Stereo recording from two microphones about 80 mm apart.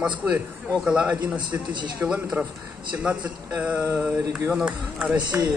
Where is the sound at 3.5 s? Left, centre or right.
Right.